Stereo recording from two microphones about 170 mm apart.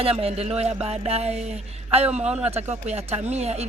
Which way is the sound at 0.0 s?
35° right (ahead or behind).